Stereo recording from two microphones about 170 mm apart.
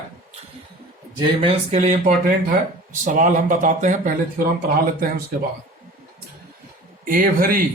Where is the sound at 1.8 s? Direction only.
50° right (ahead or behind).